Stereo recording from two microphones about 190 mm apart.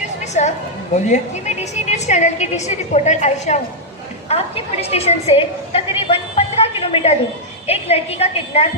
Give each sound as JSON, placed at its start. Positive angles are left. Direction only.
{"t": 0.4, "sound": "a woman's voice", "side_deg": 40}